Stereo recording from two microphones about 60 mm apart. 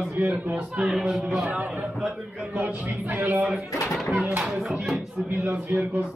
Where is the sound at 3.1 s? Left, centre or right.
Right.